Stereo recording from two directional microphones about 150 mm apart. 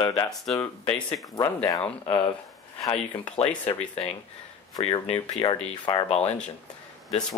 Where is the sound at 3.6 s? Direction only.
45° left (ahead or behind).